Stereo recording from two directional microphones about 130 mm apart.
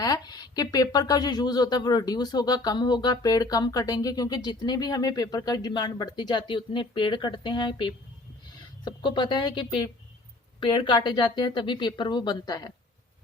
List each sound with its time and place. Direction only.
0.0 s speech: 30° left (ahead or behind)